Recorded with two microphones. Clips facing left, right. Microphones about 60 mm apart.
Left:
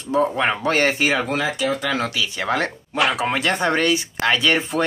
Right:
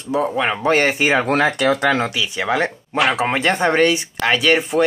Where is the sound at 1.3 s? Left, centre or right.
Right.